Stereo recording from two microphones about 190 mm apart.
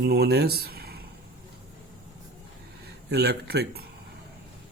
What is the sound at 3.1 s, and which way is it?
Speech, 60° right (ahead or behind).